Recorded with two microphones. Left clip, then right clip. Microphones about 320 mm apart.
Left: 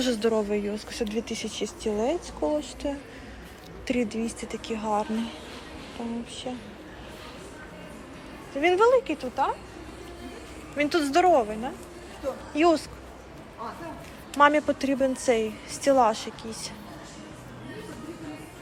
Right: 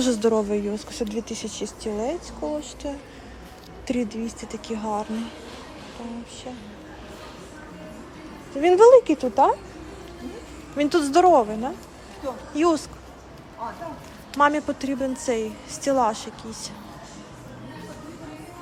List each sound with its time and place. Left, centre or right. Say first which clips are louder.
0.0 s a woman's voice: right 4 dB; centre
8.6 s speech: right 7 dB; centre
10.8 s speech: right 4 dB; centre
14.3 s a woman's voice: even; centre